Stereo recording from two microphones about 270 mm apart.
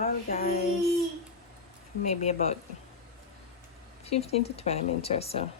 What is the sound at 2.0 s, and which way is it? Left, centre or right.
Speech, left.